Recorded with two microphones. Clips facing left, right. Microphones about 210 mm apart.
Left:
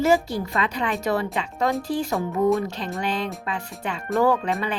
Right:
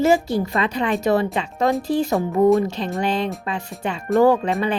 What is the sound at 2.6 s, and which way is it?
Speech, 25° right (ahead or behind).